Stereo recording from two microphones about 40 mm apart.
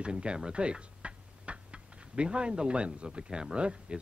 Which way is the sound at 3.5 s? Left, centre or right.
Right.